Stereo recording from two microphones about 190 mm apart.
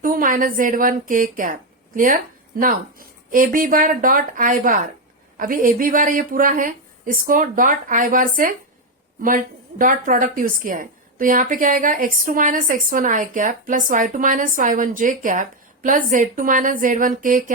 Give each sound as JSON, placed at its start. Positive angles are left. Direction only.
{"t": 0.0, "sound": "a woman's voice", "side_deg": -45}